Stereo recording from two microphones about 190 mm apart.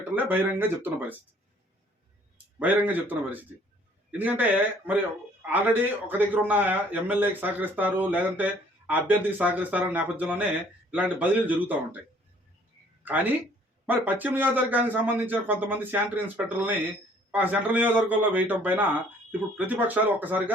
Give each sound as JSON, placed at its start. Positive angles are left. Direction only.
{"t": 0.1, "sound": "a man's voice", "side_deg": -10}
{"t": 2.6, "sound": "a man's voice", "side_deg": -10}
{"t": 13.0, "sound": "a man's voice", "side_deg": -10}